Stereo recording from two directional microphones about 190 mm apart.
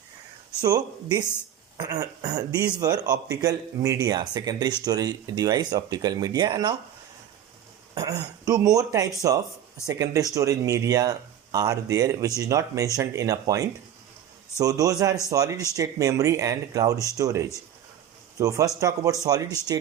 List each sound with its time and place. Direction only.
0.6 s a man's voice: 20° right (ahead or behind)
7.9 s a man's voice: 20° right (ahead or behind)